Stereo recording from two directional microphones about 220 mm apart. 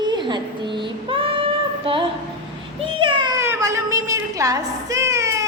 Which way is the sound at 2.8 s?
25° right (ahead or behind).